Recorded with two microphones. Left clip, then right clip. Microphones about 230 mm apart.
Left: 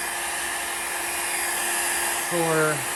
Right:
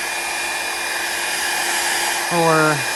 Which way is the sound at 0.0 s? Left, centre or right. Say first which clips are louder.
Right 6 dB; right.